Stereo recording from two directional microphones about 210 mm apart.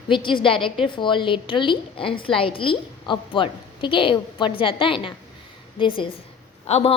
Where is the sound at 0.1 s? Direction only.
25° left (ahead or behind).